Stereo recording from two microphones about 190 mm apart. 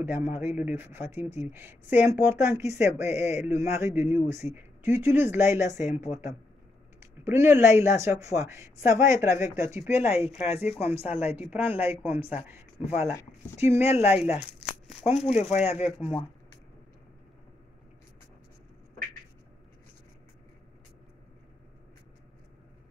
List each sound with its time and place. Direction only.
0.0 s speech: 10° right (ahead or behind)
10.2 s speech: 35° left (ahead or behind)
11.3 s speech: 10° right (ahead or behind)
15.0 s speech: 35° left (ahead or behind)